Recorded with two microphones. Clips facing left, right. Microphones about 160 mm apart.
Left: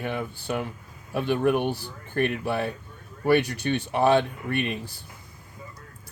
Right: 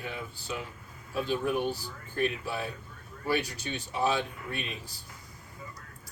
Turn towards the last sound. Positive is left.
turn(degrees=65)  # may be behind; listen again after turning